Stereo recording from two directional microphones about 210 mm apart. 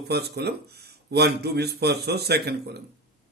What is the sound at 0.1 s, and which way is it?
Speech, 50° right (ahead or behind).